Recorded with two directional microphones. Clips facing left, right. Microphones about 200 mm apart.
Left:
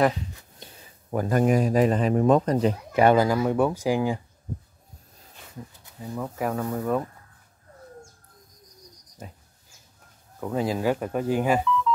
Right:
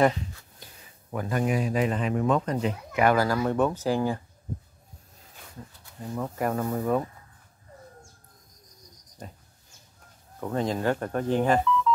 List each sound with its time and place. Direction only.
0.3 s a sound: 15° left (ahead or behind)
1.1 s a man's voice: 40° left (ahead or behind)
3.3 s speech: 10° left (ahead or behind)
5.9 s speech: centre (ahead or behind)
9.2 s speech: centre (ahead or behind)
10.4 s speech: 5° left (ahead or behind)